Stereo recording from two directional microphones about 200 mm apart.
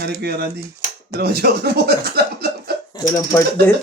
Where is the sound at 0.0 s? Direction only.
55° right (ahead or behind).